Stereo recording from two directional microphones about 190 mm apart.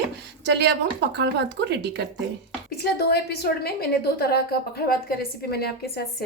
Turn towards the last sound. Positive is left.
turn(degrees=55)  # may be behind; listen again after turning